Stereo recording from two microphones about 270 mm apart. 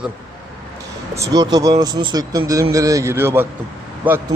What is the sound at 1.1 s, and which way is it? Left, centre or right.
A man's voice, centre.